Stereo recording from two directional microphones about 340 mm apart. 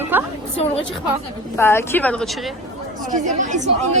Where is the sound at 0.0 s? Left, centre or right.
Centre.